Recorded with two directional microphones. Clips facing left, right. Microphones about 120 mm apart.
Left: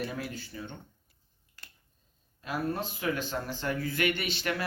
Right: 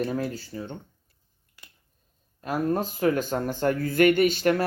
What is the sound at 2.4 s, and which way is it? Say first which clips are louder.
Speech: right 7 dB; 45° right (ahead or behind).